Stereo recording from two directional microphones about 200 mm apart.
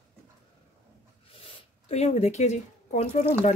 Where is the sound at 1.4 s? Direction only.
30° left (ahead or behind).